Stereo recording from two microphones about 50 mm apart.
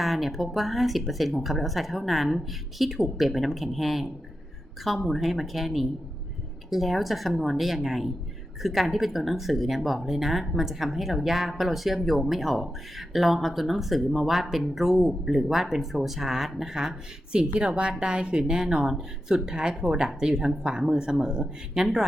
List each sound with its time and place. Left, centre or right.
0.0 s speech: centre
17.3 s speech: right